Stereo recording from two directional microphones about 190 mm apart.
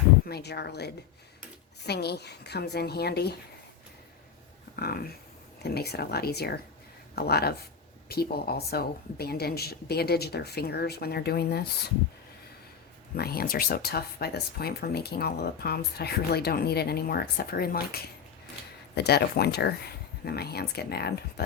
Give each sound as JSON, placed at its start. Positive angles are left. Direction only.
{"t": 0.3, "sound": "speech", "side_deg": 60}
{"t": 1.9, "sound": "speech", "side_deg": 60}
{"t": 4.8, "sound": "dog", "side_deg": 55}
{"t": 5.6, "sound": "speech", "side_deg": 60}
{"t": 13.1, "sound": "speech", "side_deg": 55}